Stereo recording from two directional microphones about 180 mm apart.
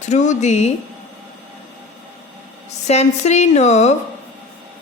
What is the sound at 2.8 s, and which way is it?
Speech, 40° left (ahead or behind).